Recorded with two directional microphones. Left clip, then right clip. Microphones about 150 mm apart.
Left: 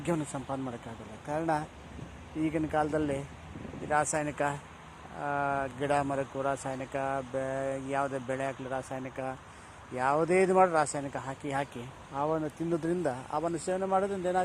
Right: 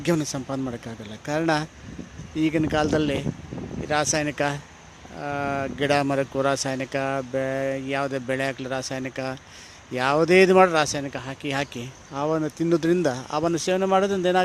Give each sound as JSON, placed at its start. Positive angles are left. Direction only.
{"t": 0.0, "sound": "speech", "side_deg": -60}
{"t": 3.8, "sound": "speech", "side_deg": -55}
{"t": 4.1, "sound": "speech", "side_deg": -70}
{"t": 5.2, "sound": "speech", "side_deg": -55}
{"t": 13.7, "sound": "speech", "side_deg": -65}